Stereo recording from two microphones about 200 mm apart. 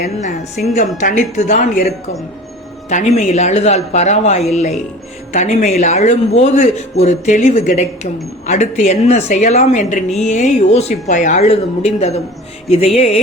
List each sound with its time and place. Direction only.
0.2 s a man's voice: 35° left (ahead or behind)
2.9 s a man's voice: 35° left (ahead or behind)